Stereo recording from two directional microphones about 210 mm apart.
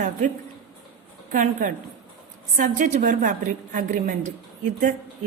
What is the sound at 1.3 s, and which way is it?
A woman's voice, 35° right (ahead or behind).